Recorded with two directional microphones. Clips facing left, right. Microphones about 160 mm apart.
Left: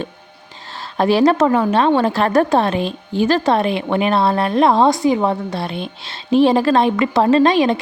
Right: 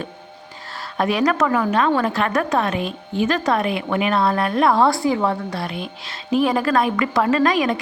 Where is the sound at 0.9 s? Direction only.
30° left (ahead or behind).